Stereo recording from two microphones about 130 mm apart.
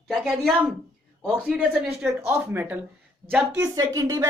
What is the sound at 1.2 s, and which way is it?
Speech, 5° right (ahead or behind).